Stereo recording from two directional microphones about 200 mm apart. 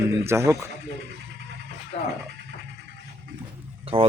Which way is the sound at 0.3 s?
15° right (ahead or behind).